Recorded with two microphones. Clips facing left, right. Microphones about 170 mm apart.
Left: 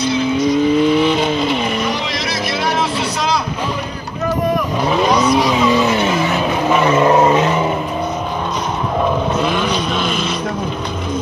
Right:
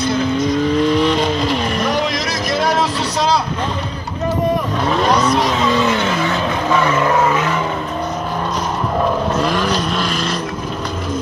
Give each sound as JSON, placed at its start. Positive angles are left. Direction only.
{"t": 0.4, "sound": "vehicle", "side_deg": 0}
{"t": 4.8, "sound": "vehicle", "side_deg": 5}
{"t": 9.0, "sound": "vehicle", "side_deg": 0}